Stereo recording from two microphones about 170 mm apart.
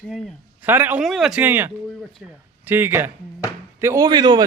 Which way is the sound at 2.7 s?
15° right (ahead or behind).